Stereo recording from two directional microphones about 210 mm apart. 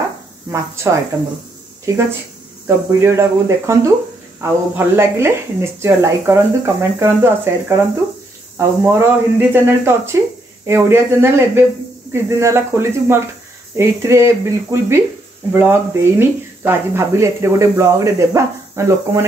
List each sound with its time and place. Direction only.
2.6 s speech: 15° right (ahead or behind)